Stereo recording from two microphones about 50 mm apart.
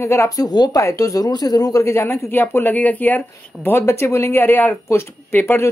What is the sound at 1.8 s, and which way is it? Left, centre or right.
Speech, left.